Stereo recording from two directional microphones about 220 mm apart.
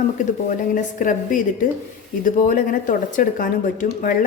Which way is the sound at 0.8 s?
35° left (ahead or behind).